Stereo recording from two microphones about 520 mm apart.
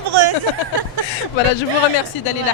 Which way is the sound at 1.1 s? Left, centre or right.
Left.